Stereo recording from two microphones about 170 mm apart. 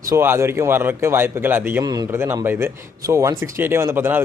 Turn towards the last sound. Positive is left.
turn(degrees=-15)  # may be behind; listen again after turning